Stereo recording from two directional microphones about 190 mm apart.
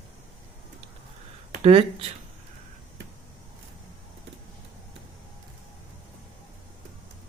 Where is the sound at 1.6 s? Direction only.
30° right (ahead or behind).